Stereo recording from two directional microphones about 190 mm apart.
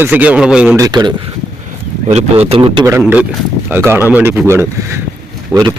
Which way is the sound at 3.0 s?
5° right (ahead or behind).